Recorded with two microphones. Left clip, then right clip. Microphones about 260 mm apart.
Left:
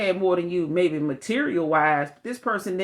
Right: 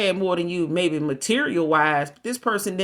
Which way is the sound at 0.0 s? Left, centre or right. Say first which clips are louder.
Even; right.